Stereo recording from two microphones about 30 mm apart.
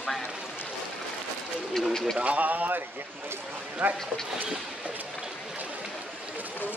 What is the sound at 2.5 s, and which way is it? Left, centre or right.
Speech, right.